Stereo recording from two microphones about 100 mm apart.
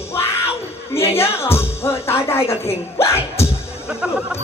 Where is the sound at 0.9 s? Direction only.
25° left (ahead or behind).